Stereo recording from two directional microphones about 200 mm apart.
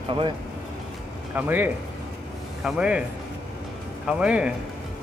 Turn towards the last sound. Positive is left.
turn(degrees=-5)  # may be behind; listen again after turning